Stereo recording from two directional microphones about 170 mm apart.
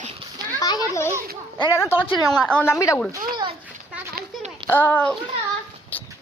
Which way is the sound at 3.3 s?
25° right (ahead or behind).